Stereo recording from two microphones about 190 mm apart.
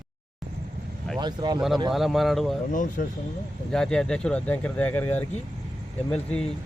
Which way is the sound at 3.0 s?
45° left (ahead or behind).